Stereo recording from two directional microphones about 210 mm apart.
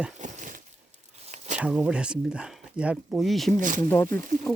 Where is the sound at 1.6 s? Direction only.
5° right (ahead or behind).